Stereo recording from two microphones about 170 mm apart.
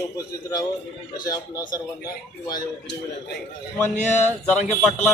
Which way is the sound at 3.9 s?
45° left (ahead or behind).